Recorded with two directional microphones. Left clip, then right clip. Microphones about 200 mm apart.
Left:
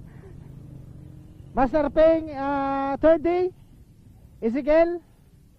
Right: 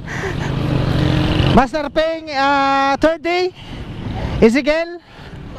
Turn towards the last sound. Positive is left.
turn(degrees=-5)  # may be behind; listen again after turning